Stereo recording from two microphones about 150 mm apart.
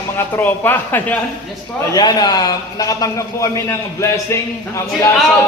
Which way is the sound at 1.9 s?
25° left (ahead or behind).